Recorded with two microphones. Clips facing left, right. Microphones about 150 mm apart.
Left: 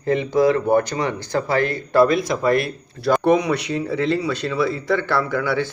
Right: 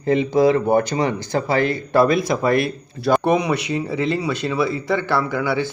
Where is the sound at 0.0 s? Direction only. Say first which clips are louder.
Right 1 dB; 15° right (ahead or behind).